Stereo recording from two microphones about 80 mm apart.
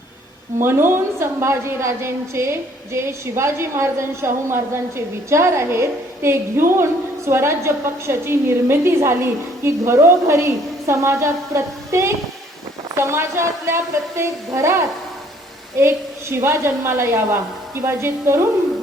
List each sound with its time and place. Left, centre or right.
0.6 s a woman's voice: right
15.8 s a woman's voice: right